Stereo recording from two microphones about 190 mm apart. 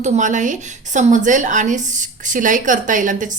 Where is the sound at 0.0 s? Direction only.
40° right (ahead or behind).